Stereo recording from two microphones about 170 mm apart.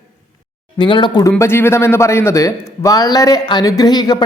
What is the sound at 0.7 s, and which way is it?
Speech, 25° left (ahead or behind).